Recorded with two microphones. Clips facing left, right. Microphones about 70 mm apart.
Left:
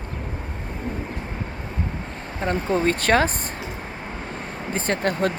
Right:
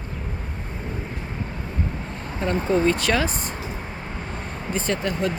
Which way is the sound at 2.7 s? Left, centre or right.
Left.